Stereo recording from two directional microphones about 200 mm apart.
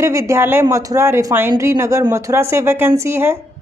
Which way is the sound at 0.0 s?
15° right (ahead or behind).